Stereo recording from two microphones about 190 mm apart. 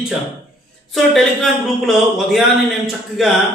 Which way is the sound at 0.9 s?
Centre (ahead or behind).